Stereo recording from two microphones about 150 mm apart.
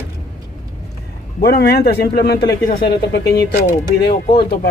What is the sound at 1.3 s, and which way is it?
A man's voice, 90° left.